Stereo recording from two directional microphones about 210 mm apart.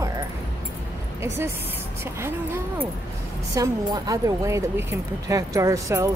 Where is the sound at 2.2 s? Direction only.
10° right (ahead or behind).